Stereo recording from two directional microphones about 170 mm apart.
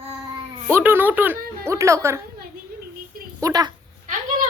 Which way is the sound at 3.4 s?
20° right (ahead or behind).